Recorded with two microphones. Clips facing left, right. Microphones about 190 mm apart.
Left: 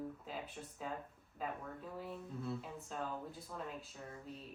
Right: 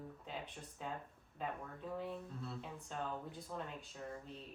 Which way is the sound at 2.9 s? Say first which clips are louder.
Left 1 dB; 5° left (ahead or behind).